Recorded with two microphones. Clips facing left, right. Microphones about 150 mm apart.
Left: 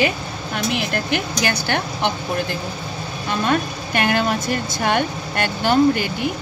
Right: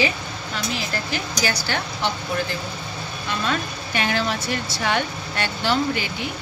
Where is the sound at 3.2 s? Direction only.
50° left (ahead or behind).